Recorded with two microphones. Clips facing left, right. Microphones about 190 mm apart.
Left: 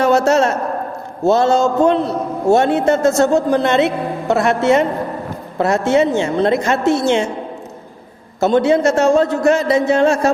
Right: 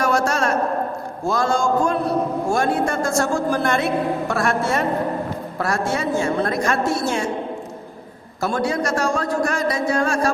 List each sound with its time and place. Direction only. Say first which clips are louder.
0.0 s a sound: left 7 dB; 25° left (ahead or behind)
1.3 s a man's voice: left 6 dB; 25° left (ahead or behind)
8.4 s a man's voice: left 9 dB; 25° left (ahead or behind)